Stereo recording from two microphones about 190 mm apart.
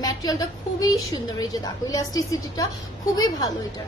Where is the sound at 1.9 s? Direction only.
20° left (ahead or behind).